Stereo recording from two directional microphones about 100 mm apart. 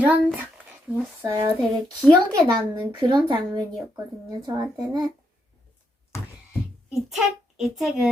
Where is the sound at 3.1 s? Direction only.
45° right (ahead or behind).